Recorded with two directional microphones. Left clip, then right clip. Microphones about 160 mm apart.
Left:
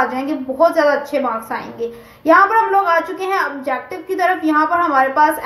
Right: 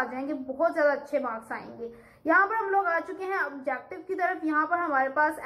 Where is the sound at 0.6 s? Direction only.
45° left (ahead or behind).